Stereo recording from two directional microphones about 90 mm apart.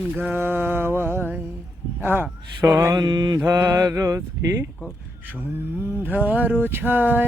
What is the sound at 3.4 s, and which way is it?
Speech, 35° right (ahead or behind).